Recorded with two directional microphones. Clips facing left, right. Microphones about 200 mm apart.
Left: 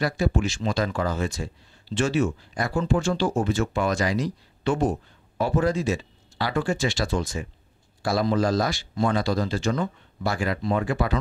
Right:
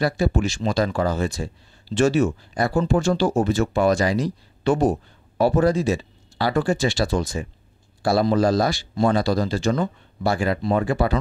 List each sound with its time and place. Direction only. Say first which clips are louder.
0.0 s speech: right 3 dB; 35° right (ahead or behind)